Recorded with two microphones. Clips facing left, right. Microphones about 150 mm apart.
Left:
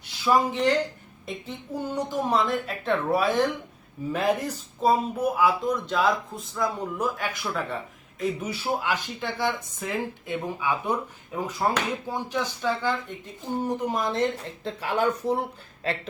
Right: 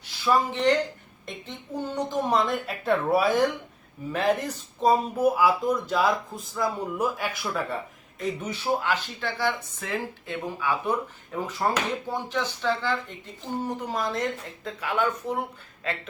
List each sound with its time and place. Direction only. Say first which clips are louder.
0.3 s speech: even; 10° left (ahead or behind)
4.1 s speech: even; 10° left (ahead or behind); by 15.4 s 35° left (ahead or behind)